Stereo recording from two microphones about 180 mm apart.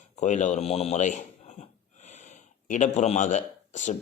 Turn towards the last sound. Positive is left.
turn(degrees=40)  # may be behind; listen again after turning